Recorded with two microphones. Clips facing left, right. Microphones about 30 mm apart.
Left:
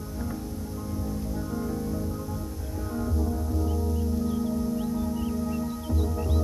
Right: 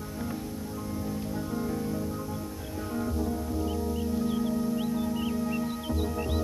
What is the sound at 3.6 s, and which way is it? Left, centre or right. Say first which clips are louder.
Music: even; right.